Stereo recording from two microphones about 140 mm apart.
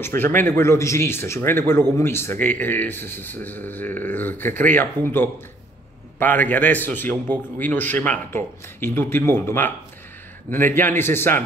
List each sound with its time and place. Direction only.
0.0 s speech: 15° left (ahead or behind)